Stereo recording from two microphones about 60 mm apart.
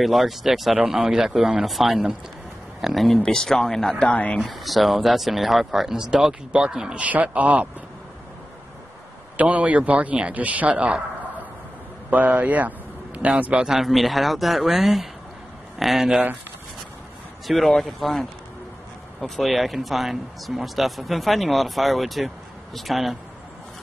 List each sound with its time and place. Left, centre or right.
0.0 s speech: centre
3.2 s speech: centre
4.0 s speech: left
4.4 s speech: centre; by 7.6 s right
9.4 s a man's voice: right
12.1 s a man's voice: right
13.7 s speech: centre
17.5 s speech: centre
19.2 s speech: centre